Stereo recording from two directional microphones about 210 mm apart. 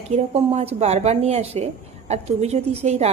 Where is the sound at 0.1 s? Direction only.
30° right (ahead or behind).